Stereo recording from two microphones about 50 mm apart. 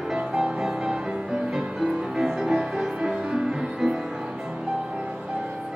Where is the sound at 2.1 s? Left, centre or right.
Centre.